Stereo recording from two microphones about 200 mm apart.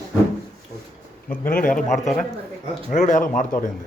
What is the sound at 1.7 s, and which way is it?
Speech, centre (ahead or behind).